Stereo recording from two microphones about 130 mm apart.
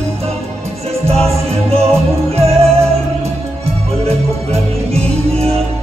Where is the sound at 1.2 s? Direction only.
50° right (ahead or behind).